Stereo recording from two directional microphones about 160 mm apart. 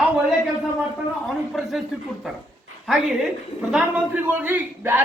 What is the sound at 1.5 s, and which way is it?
Speech, centre (ahead or behind).